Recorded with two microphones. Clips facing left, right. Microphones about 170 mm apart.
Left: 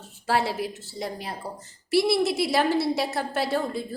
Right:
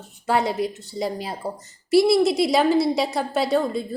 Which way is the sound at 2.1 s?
Centre (ahead or behind).